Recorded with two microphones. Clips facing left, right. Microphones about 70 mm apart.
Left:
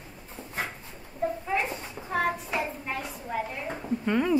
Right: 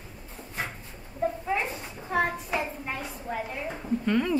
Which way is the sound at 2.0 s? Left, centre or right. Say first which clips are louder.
Right 1 dB; centre.